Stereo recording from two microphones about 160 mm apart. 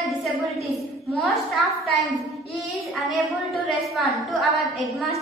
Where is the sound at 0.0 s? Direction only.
Centre (ahead or behind).